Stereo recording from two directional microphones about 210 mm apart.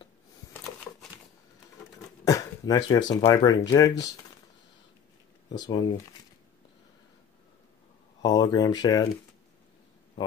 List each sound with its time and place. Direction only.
2.2 s a sound: 15° left (ahead or behind)
3.1 s speech: 20° left (ahead or behind)
5.6 s speech: 20° left (ahead or behind)
8.2 s speech: 20° left (ahead or behind)